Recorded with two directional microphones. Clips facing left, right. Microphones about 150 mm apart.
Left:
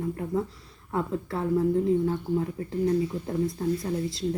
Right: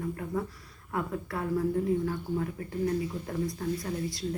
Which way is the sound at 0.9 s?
25° left (ahead or behind).